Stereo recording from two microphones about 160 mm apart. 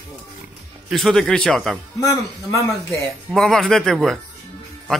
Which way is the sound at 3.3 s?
Centre (ahead or behind).